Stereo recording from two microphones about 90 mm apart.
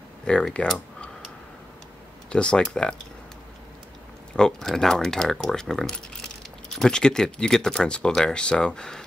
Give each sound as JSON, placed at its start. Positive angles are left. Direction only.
{"t": 0.2, "sound": "speech", "side_deg": 10}
{"t": 2.2, "sound": "speech", "side_deg": 10}
{"t": 4.4, "sound": "speech", "side_deg": 5}